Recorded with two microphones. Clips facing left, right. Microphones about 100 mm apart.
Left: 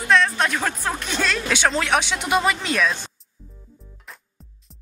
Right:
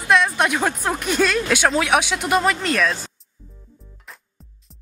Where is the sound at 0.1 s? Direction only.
10° right (ahead or behind).